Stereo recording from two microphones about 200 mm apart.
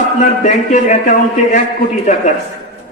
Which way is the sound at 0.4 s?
40° left (ahead or behind).